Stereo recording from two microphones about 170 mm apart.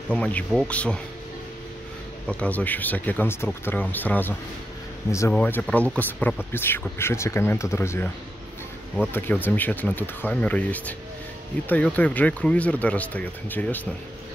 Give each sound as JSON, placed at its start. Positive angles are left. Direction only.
{"t": 0.1, "sound": "speech", "side_deg": 10}
{"t": 2.2, "sound": "speech", "side_deg": 10}
{"t": 9.1, "sound": "speech", "side_deg": 10}